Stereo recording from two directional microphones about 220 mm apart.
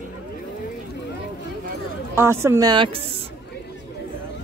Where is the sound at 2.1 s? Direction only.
10° right (ahead or behind).